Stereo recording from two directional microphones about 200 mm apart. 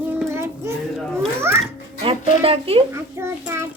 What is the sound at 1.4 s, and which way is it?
Music, 15° right (ahead or behind).